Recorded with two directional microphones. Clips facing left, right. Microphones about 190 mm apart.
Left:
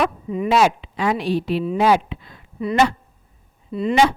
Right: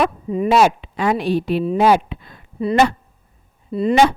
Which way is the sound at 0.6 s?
50° right (ahead or behind).